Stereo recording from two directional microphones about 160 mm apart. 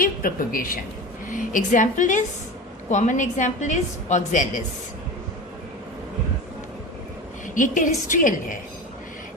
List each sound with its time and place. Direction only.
0.0 s a woman's voice: 60° left (ahead or behind)
7.4 s a woman's voice: 55° left (ahead or behind)